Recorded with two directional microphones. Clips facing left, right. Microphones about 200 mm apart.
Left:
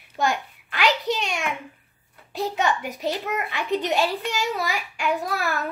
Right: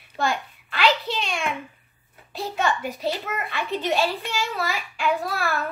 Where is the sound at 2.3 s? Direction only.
15° left (ahead or behind).